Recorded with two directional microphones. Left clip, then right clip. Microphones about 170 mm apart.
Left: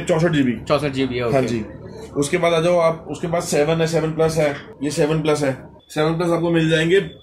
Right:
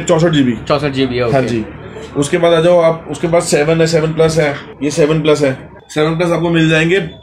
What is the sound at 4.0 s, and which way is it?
Speech, 15° right (ahead or behind).